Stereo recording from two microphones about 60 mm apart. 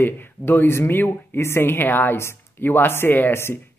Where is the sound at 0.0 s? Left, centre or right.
Left.